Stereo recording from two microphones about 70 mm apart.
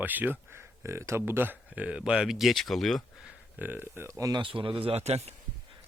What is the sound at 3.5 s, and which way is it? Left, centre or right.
Speech, right.